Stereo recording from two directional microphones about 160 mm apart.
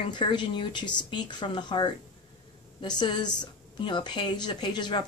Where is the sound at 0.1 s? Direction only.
30° left (ahead or behind).